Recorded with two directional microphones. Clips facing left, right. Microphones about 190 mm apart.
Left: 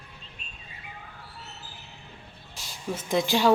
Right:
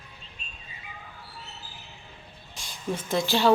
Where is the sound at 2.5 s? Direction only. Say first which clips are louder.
Right 2 dB; 5° left (ahead or behind).